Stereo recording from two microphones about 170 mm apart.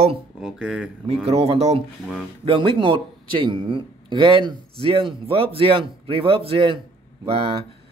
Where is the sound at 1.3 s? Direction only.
35° right (ahead or behind).